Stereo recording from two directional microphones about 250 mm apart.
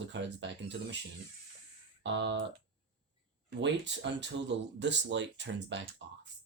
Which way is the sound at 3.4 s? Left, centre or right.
Right.